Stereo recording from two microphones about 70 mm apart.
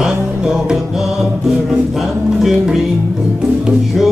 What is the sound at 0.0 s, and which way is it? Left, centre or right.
Music, centre.